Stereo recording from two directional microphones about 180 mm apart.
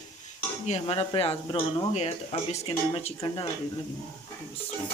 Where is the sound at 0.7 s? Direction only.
35° left (ahead or behind).